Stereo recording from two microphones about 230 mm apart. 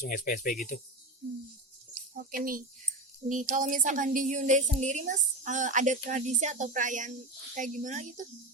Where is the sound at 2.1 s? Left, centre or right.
Right.